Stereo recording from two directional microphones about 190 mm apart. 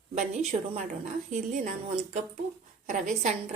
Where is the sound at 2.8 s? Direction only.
40° right (ahead or behind).